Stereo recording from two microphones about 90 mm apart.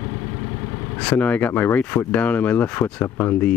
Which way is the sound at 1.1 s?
20° left (ahead or behind).